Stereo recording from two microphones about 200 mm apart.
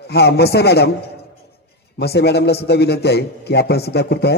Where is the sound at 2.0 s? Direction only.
55° left (ahead or behind).